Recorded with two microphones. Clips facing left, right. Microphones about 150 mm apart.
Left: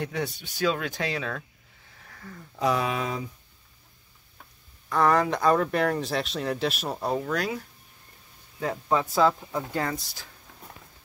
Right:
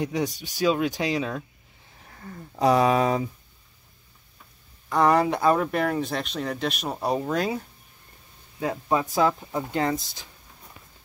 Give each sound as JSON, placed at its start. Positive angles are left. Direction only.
{"t": 0.0, "sound": "speech", "side_deg": -15}
{"t": 2.0, "sound": "speech", "side_deg": -30}
{"t": 4.8, "sound": "speech", "side_deg": -15}
{"t": 7.0, "sound": "speech", "side_deg": -15}
{"t": 7.2, "sound": "speech", "side_deg": -25}
{"t": 8.5, "sound": "speech", "side_deg": -15}